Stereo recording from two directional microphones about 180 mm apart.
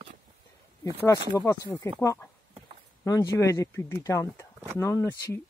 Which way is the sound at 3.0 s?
20° left (ahead or behind).